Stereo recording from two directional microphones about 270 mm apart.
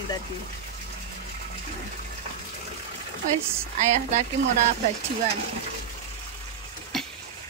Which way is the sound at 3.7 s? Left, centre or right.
Right.